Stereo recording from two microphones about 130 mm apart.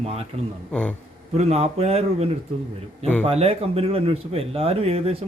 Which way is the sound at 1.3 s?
55° right (ahead or behind).